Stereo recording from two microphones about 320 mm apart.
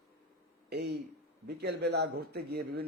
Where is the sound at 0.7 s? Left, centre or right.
Right.